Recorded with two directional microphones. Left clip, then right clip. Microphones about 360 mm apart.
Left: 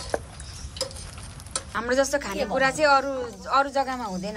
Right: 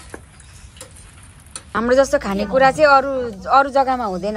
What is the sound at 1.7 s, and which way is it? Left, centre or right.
A woman's voice, centre.